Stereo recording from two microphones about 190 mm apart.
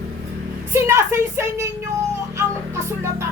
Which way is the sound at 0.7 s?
15° right (ahead or behind).